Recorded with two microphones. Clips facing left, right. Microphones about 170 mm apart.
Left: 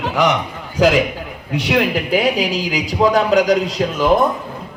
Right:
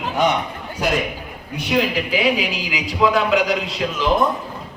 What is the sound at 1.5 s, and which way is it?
Speech, 75° left (ahead or behind).